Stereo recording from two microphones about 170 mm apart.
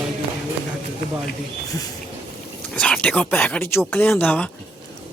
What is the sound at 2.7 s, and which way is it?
Speech, 5° left (ahead or behind).